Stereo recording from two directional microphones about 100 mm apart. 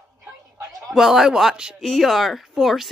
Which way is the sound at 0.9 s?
5° right (ahead or behind).